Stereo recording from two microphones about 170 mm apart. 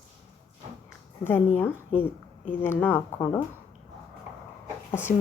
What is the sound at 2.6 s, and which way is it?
Speech, 10° left (ahead or behind).